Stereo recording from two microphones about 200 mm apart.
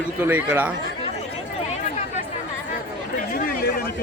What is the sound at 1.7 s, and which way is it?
Chatter, 35° left (ahead or behind).